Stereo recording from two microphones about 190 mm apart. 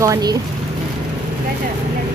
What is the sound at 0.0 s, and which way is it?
Speech, 20° right (ahead or behind).